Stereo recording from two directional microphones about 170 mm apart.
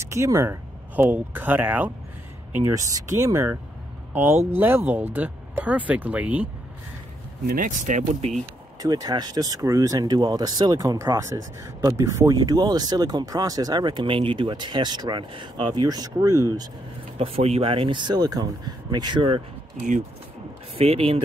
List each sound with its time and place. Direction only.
0.0 s speech: 15° right (ahead or behind)
7.4 s speech: 50° right (ahead or behind)
8.7 s speech: 20° right (ahead or behind)
17.2 s speech: 35° right (ahead or behind)
20.7 s speech: 35° right (ahead or behind)